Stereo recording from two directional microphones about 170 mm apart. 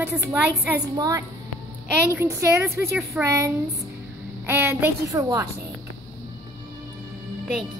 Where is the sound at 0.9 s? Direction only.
20° right (ahead or behind).